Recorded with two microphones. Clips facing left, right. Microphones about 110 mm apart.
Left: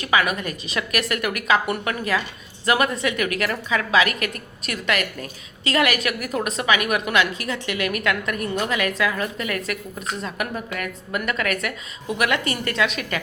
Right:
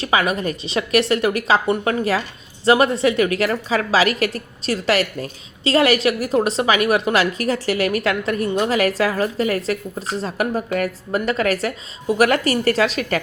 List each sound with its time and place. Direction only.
0.0 s a woman's voice: 30° right (ahead or behind)